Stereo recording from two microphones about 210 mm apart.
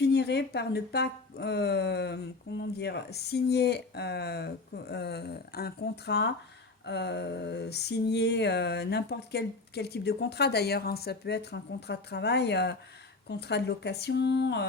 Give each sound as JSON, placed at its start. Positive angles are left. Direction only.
{"t": 0.0, "sound": "speech", "side_deg": 50}